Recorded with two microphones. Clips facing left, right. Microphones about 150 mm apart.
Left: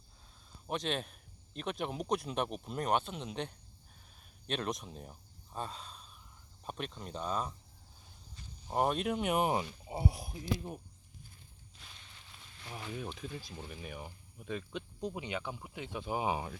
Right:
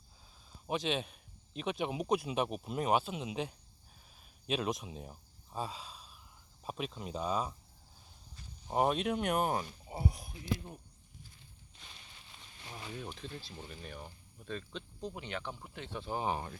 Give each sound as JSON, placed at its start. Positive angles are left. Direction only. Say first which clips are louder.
{"t": 0.7, "sound": "speech", "louder": "right 2 dB", "side_deg": 0}
{"t": 9.9, "sound": "speech", "louder": "left 2 dB", "side_deg": 25}
{"t": 10.2, "sound": "speech", "louder": "left 5 dB", "side_deg": 35}
{"t": 11.8, "sound": "a sound", "louder": "right 1 dB", "side_deg": 0}
{"t": 13.1, "sound": "speech", "louder": "left 2 dB", "side_deg": 10}